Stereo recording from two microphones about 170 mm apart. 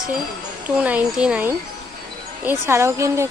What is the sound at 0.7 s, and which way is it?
Speech, 5° right (ahead or behind).